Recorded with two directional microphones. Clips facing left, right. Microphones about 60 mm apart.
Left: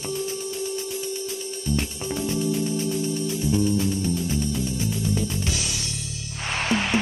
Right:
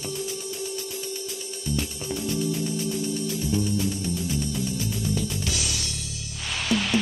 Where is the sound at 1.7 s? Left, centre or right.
Left.